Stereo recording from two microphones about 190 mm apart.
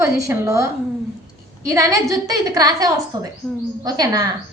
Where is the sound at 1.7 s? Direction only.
15° right (ahead or behind).